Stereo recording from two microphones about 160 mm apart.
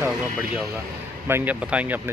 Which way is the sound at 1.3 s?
10° right (ahead or behind).